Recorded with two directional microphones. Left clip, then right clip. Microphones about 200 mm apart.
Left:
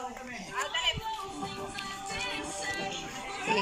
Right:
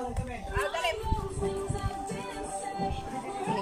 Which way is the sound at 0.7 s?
60° right (ahead or behind).